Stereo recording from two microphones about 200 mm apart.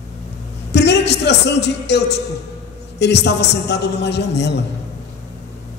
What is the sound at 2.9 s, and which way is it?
A man's voice, 60° left (ahead or behind).